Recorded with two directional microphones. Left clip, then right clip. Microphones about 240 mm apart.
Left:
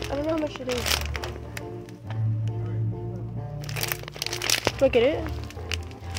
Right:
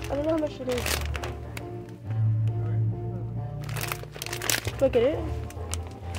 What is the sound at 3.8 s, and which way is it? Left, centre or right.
Music, centre.